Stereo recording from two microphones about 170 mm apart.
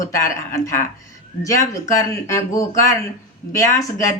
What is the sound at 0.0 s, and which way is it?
Speech, 20° left (ahead or behind).